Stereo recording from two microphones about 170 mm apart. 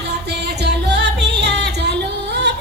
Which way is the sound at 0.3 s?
80° right.